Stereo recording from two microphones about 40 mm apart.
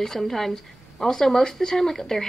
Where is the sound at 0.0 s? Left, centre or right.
Centre.